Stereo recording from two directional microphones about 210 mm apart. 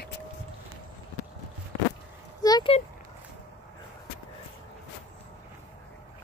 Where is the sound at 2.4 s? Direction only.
20° left (ahead or behind).